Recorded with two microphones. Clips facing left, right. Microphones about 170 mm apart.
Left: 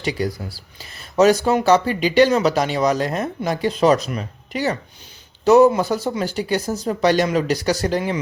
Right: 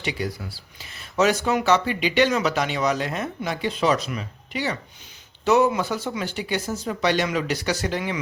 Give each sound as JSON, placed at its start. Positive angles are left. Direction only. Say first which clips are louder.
{"t": 0.0, "sound": "speech", "louder": "left 5 dB", "side_deg": 40}